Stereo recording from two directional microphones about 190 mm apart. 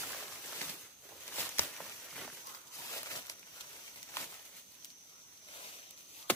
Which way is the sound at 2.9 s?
15° left (ahead or behind).